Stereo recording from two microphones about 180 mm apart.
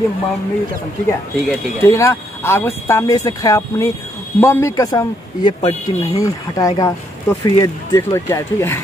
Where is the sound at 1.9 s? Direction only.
15° left (ahead or behind).